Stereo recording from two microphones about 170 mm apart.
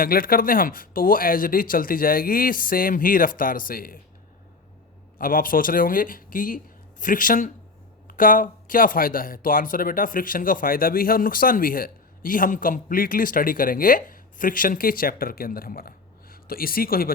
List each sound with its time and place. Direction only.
0.0 s a man's voice: 60° left (ahead or behind)
5.1 s a man's voice: 55° left (ahead or behind)